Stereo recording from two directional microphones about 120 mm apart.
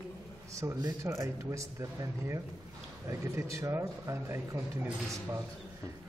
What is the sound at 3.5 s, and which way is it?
A man's voice, 25° right (ahead or behind).